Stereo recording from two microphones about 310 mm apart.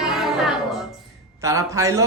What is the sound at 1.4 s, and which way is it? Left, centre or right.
Speech, centre.